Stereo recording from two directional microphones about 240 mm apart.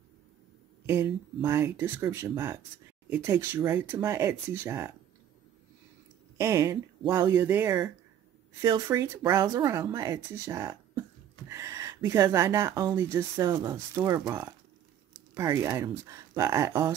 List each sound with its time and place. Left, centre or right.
0.8 s speech: centre
6.3 s speech: centre